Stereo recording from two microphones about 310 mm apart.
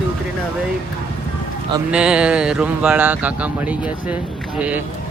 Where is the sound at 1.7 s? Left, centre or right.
Centre.